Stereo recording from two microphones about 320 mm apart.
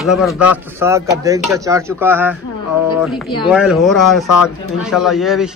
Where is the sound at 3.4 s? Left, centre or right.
Centre.